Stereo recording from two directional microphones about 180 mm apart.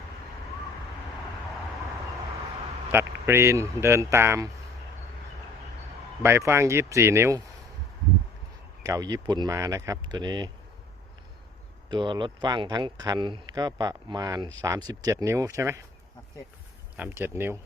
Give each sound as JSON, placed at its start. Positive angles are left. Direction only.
{"t": 2.9, "sound": "speech", "side_deg": -15}
{"t": 6.2, "sound": "speech", "side_deg": -15}
{"t": 8.8, "sound": "speech", "side_deg": -20}
{"t": 11.9, "sound": "speech", "side_deg": -25}
{"t": 17.0, "sound": "speech", "side_deg": -10}